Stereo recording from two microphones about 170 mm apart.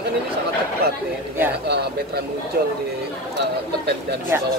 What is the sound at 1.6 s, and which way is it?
Speech, 75° right (ahead or behind).